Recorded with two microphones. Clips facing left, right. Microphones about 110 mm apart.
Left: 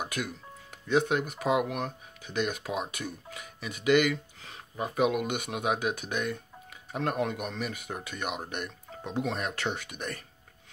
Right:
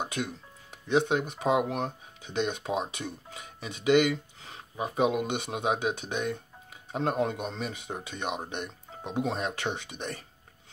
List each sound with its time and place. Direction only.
0.0 s speech: 25° right (ahead or behind)